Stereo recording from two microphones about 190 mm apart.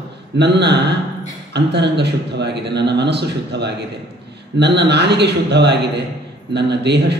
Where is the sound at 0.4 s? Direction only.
65° right (ahead or behind).